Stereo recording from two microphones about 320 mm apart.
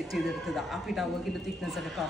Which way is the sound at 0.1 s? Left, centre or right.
Centre.